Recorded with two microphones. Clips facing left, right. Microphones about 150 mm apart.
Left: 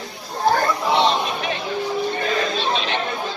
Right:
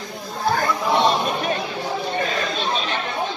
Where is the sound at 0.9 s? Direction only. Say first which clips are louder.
Right 1 dB; 45° right (ahead or behind).